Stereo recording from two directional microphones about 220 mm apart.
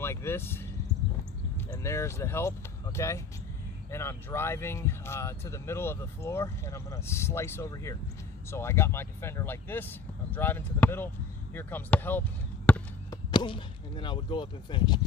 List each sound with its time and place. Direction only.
0.0 s speech: 10° left (ahead or behind)
12.6 s basketball bounce: 5° left (ahead or behind)
13.3 s speech: 20° left (ahead or behind)